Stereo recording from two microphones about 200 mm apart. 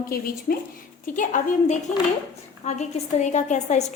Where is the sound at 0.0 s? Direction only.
45° left (ahead or behind).